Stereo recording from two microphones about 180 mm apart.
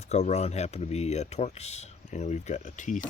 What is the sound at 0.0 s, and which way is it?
Speech, 40° left (ahead or behind).